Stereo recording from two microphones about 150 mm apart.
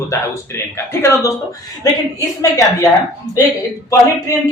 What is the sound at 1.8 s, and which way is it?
A man's voice, 20° left (ahead or behind).